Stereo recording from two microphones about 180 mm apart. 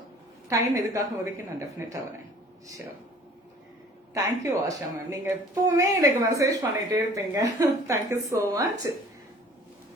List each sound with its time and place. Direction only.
0.4 s speech: 20° right (ahead or behind)
4.1 s speech: 15° right (ahead or behind)